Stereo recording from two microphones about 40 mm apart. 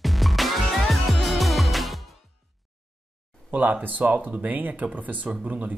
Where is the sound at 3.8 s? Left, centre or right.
Right.